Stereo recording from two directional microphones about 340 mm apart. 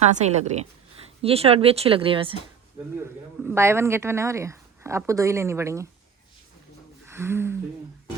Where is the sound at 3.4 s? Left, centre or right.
Centre.